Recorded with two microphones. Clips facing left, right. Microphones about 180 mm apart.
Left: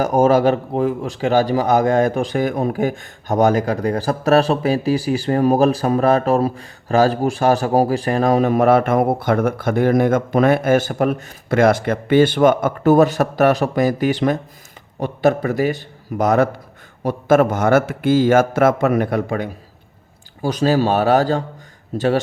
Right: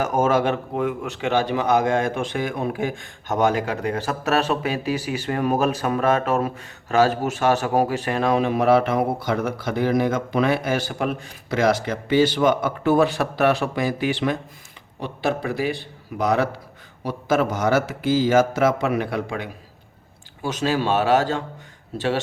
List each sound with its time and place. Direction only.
0.0 s a man's voice: 35° left (ahead or behind)